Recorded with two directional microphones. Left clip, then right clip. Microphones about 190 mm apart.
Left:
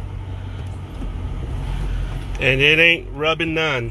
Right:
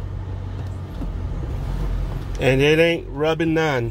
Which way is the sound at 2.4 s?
40° right (ahead or behind).